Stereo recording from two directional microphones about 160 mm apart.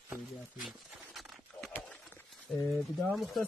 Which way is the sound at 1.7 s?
5° left (ahead or behind).